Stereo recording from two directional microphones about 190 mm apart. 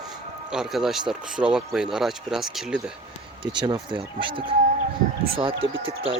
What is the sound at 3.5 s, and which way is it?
Speech, 25° right (ahead or behind).